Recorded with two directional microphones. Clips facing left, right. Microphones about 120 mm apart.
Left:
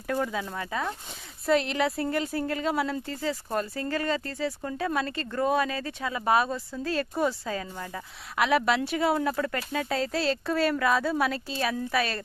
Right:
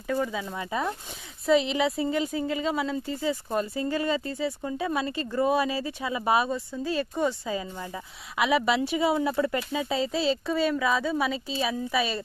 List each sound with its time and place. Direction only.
0.1 s speech: 5° right (ahead or behind)
1.5 s speech: centre (ahead or behind)
9.4 s speech: 15° right (ahead or behind)